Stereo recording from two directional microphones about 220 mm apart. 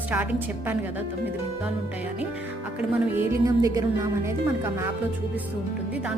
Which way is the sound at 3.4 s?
15° right (ahead or behind).